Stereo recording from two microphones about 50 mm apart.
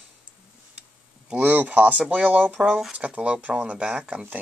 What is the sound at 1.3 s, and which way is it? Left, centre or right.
Speech, right.